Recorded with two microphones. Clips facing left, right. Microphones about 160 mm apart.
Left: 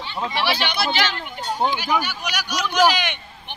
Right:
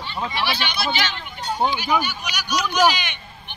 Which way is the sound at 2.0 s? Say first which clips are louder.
Left 1 dB; 90° left.